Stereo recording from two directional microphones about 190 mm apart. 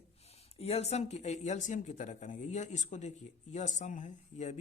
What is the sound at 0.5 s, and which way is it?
Speech, 35° left (ahead or behind).